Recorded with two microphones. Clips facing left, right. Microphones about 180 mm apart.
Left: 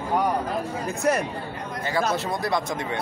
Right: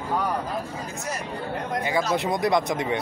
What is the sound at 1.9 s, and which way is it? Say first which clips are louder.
Speech: even; 15° right (ahead or behind).